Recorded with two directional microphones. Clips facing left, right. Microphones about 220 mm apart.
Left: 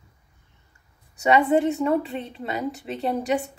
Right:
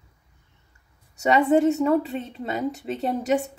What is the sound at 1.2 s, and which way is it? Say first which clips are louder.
A woman's voice: right 1 dB; 40° right (ahead or behind).